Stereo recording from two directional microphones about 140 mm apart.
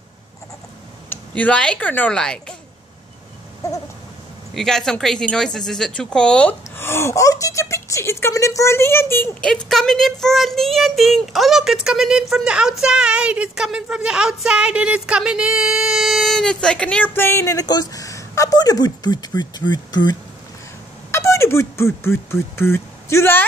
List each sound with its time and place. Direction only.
1.1 s speech: 10° left (ahead or behind)
4.6 s speech: 5° left (ahead or behind)
9.5 s speech: 5° left (ahead or behind); by 20.2 s 30° left (ahead or behind)
21.1 s speech: 20° left (ahead or behind)